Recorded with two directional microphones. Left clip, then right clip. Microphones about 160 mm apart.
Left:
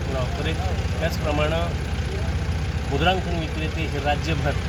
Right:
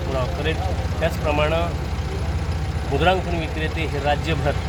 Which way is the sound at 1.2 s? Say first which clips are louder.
Right 3 dB; 5° right (ahead or behind).